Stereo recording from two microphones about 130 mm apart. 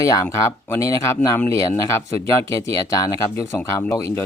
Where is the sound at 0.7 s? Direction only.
20° left (ahead or behind).